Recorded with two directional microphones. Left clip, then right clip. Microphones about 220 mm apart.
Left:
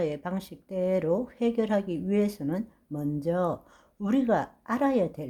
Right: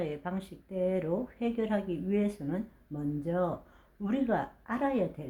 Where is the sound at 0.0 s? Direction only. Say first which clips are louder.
Left 5 dB; 40° left (ahead or behind).